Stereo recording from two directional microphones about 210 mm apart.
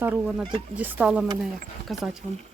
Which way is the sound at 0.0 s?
10° right (ahead or behind).